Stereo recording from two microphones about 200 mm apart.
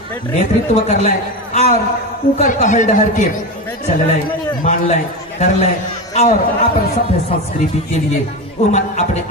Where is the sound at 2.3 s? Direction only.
40° left (ahead or behind).